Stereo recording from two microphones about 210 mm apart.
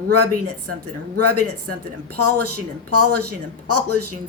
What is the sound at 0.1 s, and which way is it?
Speech, 90° right.